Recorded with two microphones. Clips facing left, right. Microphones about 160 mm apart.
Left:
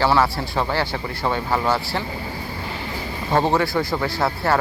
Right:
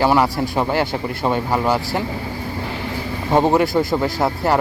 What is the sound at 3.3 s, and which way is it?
Speech, 15° right (ahead or behind).